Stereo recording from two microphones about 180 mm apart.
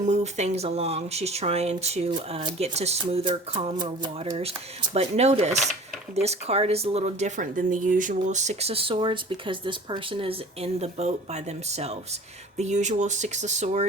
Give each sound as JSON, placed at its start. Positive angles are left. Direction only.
{"t": 0.0, "sound": "speech", "side_deg": -40}